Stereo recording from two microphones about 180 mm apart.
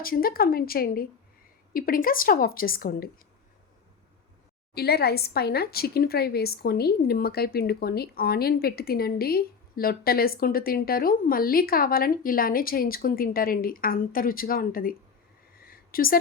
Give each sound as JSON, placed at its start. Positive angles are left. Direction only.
{"t": 0.0, "sound": "a woman's voice", "side_deg": 55}
{"t": 4.7, "sound": "a woman's voice", "side_deg": 60}
{"t": 15.6, "sound": "a sound", "side_deg": 55}